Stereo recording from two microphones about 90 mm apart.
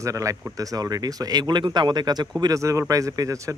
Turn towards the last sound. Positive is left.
turn(degrees=-40)  # may be behind; listen again after turning